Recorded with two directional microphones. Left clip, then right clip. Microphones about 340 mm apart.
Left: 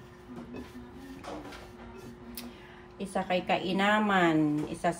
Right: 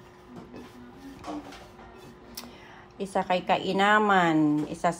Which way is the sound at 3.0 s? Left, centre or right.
Centre.